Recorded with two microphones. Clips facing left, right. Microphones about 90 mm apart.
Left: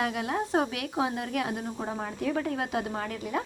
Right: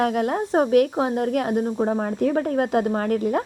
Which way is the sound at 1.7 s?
30° right (ahead or behind).